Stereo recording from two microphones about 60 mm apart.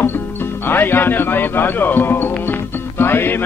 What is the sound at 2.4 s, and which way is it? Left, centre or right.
Music, left.